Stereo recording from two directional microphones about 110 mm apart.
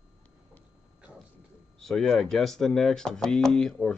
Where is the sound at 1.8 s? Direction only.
5° left (ahead or behind).